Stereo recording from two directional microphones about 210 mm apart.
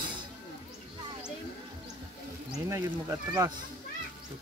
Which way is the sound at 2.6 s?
15° right (ahead or behind).